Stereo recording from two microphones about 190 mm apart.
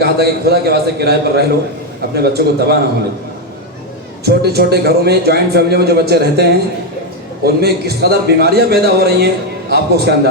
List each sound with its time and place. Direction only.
0.0 s a man's voice: 55° right (ahead or behind)
4.3 s a man's voice: 55° right (ahead or behind)